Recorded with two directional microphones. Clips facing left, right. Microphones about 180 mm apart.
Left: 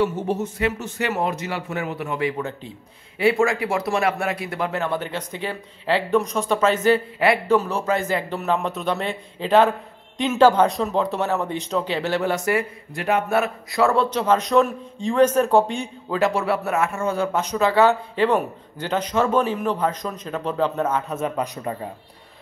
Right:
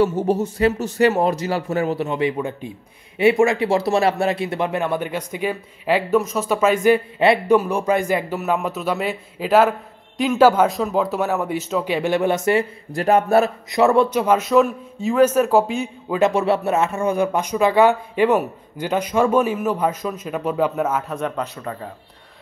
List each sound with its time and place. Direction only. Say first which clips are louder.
0.0 s a man's voice: right 4 dB; 35° right (ahead or behind)
2.0 s a man's voice: right 3 dB; 20° right (ahead or behind)
12.9 s a man's voice: right 5 dB; 40° right (ahead or behind)
13.7 s speech: right 4 dB; 20° right (ahead or behind); by 15.9 s 5° right (ahead or behind)
16.1 s speech: right 3 dB; 20° right (ahead or behind); by 21.5 s centre (ahead or behind)